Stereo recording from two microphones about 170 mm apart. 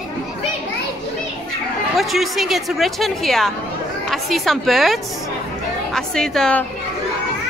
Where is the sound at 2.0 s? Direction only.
Centre (ahead or behind).